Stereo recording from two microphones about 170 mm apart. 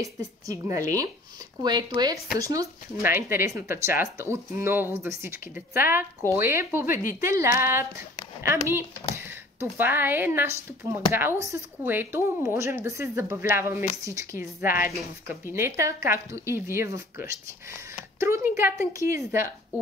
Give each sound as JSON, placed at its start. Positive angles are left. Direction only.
{"t": 0.0, "sound": "a woman's voice", "side_deg": -20}